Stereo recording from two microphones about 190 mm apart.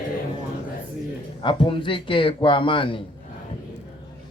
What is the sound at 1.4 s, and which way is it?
A man's voice, 25° left (ahead or behind).